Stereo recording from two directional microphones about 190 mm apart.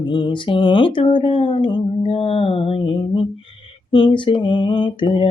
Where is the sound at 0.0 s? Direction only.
25° left (ahead or behind).